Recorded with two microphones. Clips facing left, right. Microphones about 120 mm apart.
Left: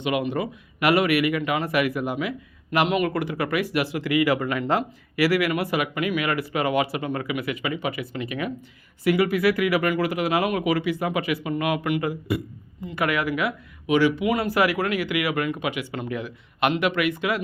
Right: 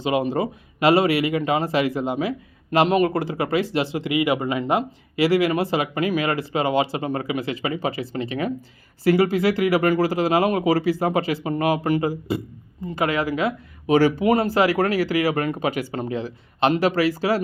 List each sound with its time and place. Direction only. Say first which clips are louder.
0.0 s speech: right 3 dB; 30° right (ahead or behind)